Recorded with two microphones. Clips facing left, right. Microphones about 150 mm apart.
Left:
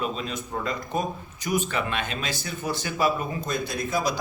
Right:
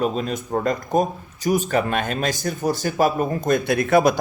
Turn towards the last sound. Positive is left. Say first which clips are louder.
# right 10 dB
turn(degrees=-60)  # may be behind; listen again after turning